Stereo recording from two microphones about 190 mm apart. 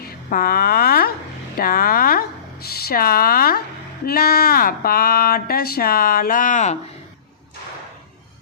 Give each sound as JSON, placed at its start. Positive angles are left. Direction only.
{"t": 0.0, "sound": "speech", "side_deg": 50}